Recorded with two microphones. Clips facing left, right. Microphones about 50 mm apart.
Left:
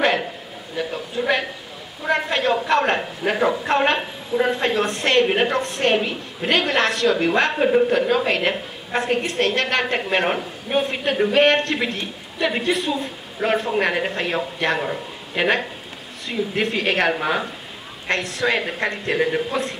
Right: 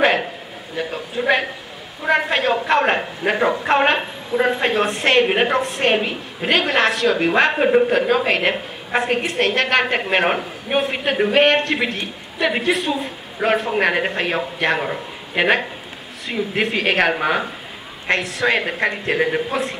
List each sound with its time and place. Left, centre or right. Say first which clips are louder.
0.0 s a sound: right 3 dB; right
0.7 s a man's voice: right 1 dB; centre
2.5 s a man's voice: right 1 dB; centre
13.4 s a woman's voice: right 2 dB; centre